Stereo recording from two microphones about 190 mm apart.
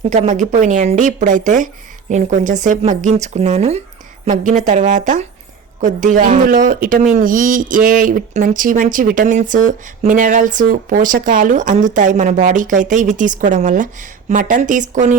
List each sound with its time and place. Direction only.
0.0 s speech: 40° right (ahead or behind)